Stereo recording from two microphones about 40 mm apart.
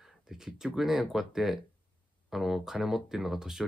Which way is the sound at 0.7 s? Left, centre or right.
Centre.